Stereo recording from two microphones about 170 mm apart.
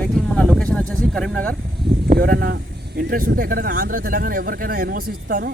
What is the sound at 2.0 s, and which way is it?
Speech, 65° right (ahead or behind).